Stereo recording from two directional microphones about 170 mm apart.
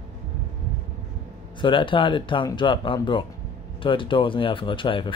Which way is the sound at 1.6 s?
30° left (ahead or behind).